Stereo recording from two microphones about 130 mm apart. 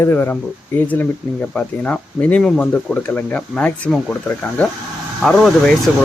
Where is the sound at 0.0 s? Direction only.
15° left (ahead or behind).